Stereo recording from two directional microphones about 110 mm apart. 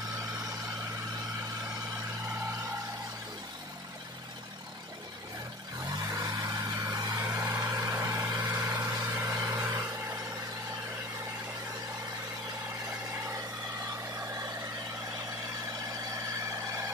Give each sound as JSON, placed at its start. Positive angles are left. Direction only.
{"t": 6.0, "sound": "vehicle", "side_deg": -35}